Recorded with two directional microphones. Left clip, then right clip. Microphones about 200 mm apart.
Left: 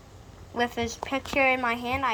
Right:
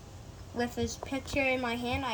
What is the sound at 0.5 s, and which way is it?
Speech, 35° left (ahead or behind).